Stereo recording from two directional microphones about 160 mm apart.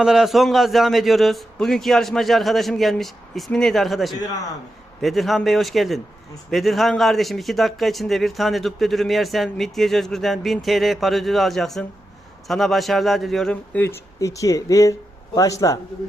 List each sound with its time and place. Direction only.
0.0 s a man's voice: 5° right (ahead or behind); by 15.8 s 20° left (ahead or behind)